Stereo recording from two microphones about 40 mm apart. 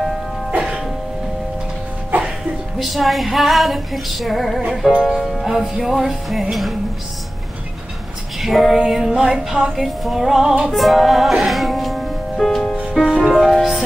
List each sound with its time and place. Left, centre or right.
0.5 s music: right
2.8 s female singing: centre
5.4 s music: centre
8.4 s female singing: centre
8.7 s music: centre
10.7 s music: centre